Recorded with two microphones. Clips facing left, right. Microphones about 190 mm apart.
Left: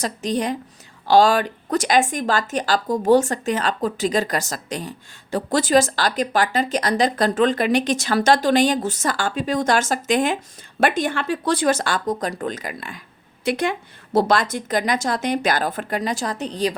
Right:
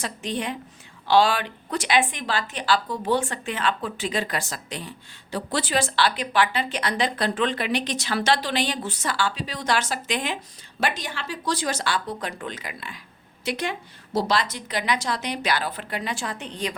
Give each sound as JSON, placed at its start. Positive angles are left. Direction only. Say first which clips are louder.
{"t": 0.0, "sound": "a woman's voice", "louder": "left 6 dB", "side_deg": 40}